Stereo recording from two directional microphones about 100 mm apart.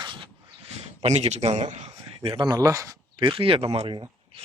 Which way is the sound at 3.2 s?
60° right (ahead or behind).